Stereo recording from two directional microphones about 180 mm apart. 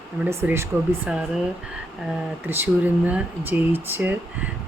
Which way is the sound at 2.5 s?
10° right (ahead or behind).